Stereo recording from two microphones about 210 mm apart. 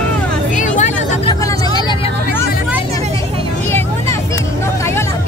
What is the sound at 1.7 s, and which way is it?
Vehicle, 20° left (ahead or behind).